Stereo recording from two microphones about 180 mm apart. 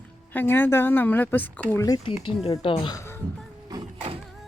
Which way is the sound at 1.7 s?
20° left (ahead or behind).